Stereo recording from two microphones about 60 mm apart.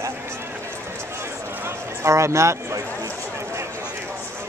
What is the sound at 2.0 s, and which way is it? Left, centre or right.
Speech, right.